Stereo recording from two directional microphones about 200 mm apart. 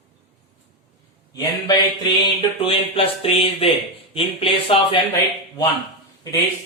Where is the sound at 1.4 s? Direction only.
20° left (ahead or behind).